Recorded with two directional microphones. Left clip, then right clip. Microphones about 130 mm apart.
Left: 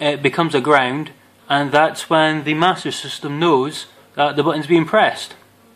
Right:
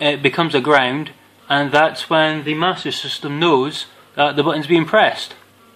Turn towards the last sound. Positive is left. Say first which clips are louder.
# right 1 dB
turn(degrees=0)  # may be behind; listen again after turning